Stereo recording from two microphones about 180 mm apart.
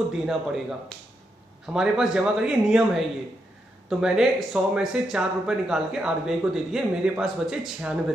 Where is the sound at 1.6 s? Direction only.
5° right (ahead or behind).